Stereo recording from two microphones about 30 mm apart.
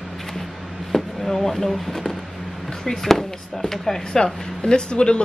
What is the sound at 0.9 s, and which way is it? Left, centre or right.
Speech, centre.